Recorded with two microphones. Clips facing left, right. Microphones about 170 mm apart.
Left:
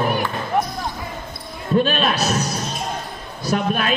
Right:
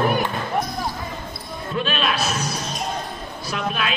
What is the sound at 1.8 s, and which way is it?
Speech, 40° left (ahead or behind).